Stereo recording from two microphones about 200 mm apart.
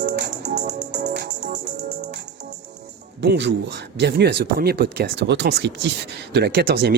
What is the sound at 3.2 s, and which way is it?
Music, 60° right (ahead or behind).